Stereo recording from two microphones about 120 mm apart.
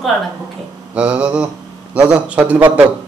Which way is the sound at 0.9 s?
10° right (ahead or behind).